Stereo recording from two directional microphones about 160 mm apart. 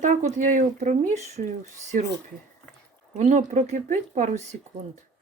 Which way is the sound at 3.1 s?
45° right (ahead or behind).